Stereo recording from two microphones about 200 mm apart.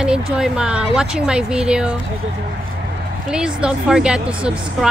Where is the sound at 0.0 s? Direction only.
5° right (ahead or behind).